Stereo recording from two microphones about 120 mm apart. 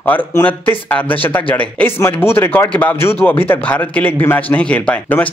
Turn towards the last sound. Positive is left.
turn(degrees=15)  # may be behind; listen again after turning